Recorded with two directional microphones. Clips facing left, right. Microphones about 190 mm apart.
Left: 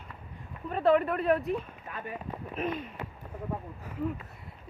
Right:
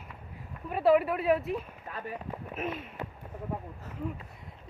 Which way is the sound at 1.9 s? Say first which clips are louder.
Right 1 dB; 40° right (ahead or behind).